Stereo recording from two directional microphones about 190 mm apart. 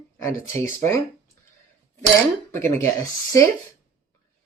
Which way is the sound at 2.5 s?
15° left (ahead or behind).